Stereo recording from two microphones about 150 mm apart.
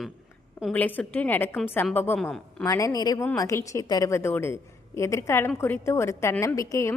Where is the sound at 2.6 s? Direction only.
20° left (ahead or behind).